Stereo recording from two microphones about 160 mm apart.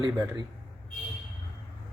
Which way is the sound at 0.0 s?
25° right (ahead or behind).